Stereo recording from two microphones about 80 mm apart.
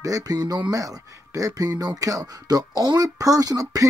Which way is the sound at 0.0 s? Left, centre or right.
Right.